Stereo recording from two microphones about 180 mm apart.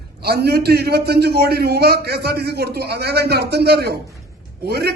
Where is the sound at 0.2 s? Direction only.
60° right (ahead or behind).